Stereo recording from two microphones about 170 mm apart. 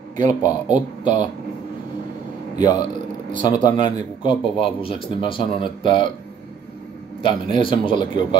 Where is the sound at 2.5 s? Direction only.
25° left (ahead or behind).